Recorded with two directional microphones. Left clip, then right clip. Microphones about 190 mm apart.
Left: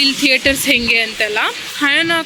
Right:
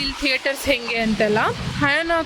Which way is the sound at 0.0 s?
10° right (ahead or behind).